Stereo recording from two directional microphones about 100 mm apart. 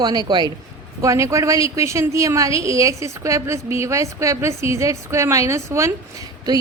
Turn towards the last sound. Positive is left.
turn(degrees=-35)  # may be behind; listen again after turning